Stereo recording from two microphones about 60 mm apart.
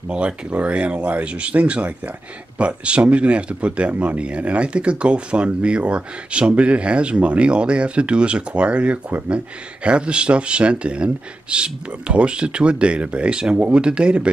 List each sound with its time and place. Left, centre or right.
0.1 s speech: right